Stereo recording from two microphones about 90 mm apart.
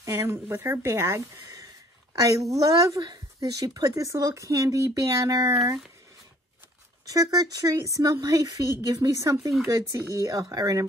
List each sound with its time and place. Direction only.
0.0 s a woman's voice: 30° right (ahead or behind)
7.1 s a woman's voice: 40° right (ahead or behind)